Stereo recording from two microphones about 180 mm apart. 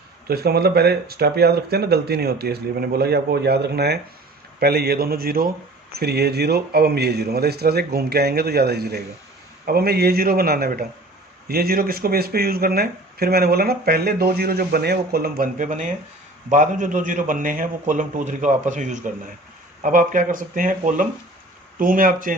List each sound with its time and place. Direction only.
0.3 s a man's voice: 60° right (ahead or behind)